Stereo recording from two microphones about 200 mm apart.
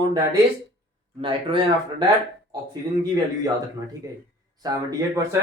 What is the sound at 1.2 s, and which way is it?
Speech, 25° right (ahead or behind).